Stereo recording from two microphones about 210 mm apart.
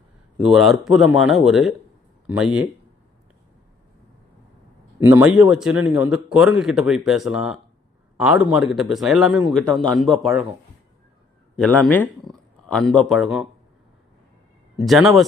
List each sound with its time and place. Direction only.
0.3 s speech: centre (ahead or behind)
4.9 s speech: 10° right (ahead or behind)
11.5 s speech: 5° left (ahead or behind)
14.8 s speech: centre (ahead or behind)